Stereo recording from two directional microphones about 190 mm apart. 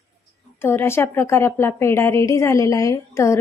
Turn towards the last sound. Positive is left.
turn(degrees=15)  # may be behind; listen again after turning